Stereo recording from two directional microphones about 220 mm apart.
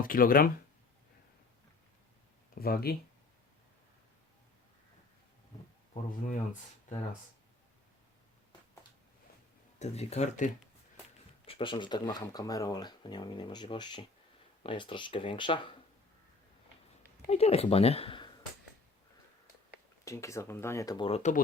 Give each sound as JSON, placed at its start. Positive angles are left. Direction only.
{"t": 0.0, "sound": "speech", "side_deg": 40}
{"t": 2.6, "sound": "speech", "side_deg": 45}
{"t": 5.9, "sound": "speech", "side_deg": 35}
{"t": 9.7, "sound": "speech", "side_deg": 30}
{"t": 17.2, "sound": "speech", "side_deg": 30}
{"t": 20.1, "sound": "speech", "side_deg": 15}